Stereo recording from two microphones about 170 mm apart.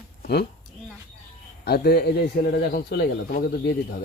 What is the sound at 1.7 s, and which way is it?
A man's voice, 70° left (ahead or behind).